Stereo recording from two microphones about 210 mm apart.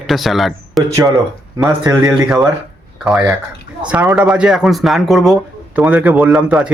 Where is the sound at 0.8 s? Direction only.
15° right (ahead or behind).